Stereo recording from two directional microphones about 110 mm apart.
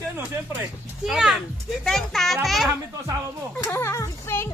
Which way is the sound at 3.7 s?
25° left (ahead or behind).